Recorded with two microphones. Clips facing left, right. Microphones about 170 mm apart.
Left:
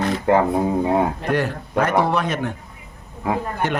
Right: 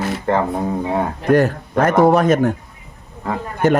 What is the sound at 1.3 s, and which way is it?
A man's voice, 45° right (ahead or behind).